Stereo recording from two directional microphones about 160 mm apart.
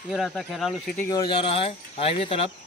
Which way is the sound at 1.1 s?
25° left (ahead or behind).